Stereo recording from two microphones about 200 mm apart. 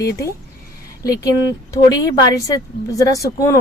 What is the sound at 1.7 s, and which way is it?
Speech, 20° left (ahead or behind).